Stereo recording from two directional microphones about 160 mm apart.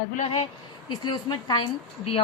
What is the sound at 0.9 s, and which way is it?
Speech, 25° left (ahead or behind).